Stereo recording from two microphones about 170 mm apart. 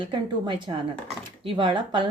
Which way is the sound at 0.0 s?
30° right (ahead or behind).